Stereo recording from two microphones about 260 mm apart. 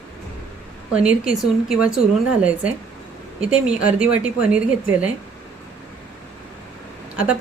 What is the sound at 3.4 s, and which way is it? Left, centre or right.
A woman's voice, centre.